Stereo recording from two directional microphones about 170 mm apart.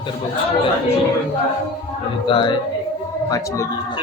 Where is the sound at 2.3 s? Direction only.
30° left (ahead or behind).